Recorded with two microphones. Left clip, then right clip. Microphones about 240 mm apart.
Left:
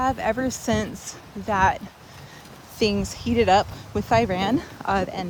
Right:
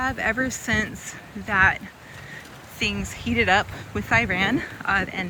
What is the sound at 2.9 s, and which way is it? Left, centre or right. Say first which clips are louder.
Speech: left 2 dB; centre.